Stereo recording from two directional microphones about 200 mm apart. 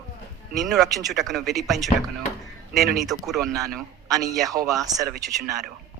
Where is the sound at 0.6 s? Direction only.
Centre (ahead or behind).